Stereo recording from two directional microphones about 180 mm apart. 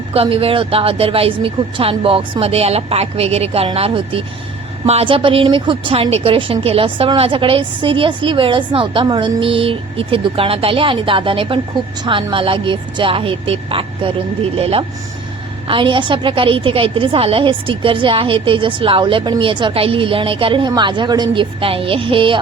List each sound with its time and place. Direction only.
0.1 s a woman's voice: 30° right (ahead or behind)